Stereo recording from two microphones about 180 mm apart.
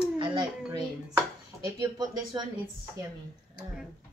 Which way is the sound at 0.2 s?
25° right (ahead or behind).